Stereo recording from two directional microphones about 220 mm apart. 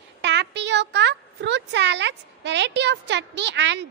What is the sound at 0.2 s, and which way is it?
A woman's voice, 50° right (ahead or behind).